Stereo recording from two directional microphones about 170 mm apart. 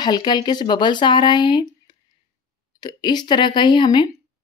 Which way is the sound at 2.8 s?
25° left (ahead or behind).